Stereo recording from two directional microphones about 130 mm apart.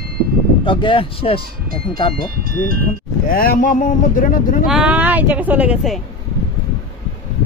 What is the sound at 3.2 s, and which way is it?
Speech, 90° left.